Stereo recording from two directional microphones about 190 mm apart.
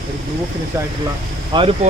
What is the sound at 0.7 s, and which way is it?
Speech, 15° right (ahead or behind).